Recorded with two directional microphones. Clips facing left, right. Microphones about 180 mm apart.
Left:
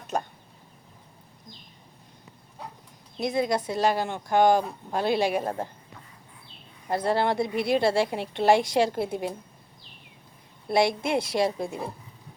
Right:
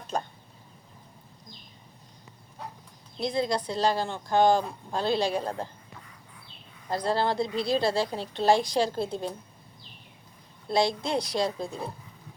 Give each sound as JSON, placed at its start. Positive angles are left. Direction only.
{"t": 3.2, "sound": "a woman's voice", "side_deg": 20}
{"t": 6.8, "sound": "a woman's voice", "side_deg": 20}
{"t": 10.8, "sound": "a woman's voice", "side_deg": 20}